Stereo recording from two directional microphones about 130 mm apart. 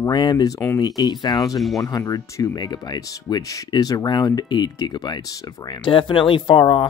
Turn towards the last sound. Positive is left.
turn(degrees=35)  # may be behind; listen again after turning